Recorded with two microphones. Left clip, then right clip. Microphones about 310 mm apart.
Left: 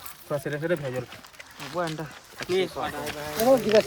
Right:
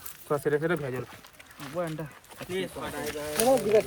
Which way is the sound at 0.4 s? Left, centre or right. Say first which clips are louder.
Right 1 dB; centre.